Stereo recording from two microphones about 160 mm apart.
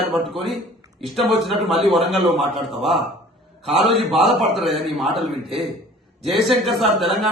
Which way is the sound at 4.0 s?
Centre (ahead or behind).